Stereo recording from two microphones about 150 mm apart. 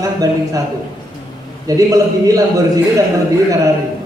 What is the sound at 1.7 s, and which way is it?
A man's voice, 25° right (ahead or behind).